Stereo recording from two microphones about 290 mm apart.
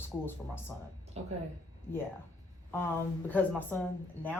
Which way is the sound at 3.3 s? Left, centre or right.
Centre.